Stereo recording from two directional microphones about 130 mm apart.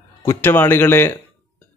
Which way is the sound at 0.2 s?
15° left (ahead or behind).